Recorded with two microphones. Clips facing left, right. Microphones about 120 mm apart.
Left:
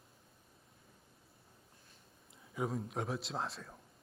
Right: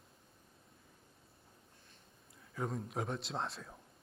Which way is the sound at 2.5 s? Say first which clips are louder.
Left 1 dB; 5° left (ahead or behind).